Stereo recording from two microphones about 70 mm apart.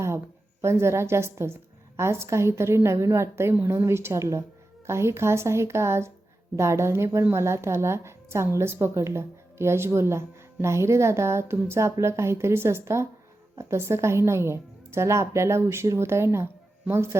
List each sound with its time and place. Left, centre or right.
0.6 s a woman's voice: right